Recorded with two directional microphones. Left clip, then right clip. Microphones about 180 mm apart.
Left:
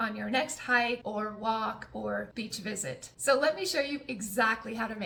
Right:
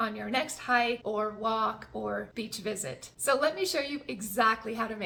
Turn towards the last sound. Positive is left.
turn(degrees=-20)  # may be behind; listen again after turning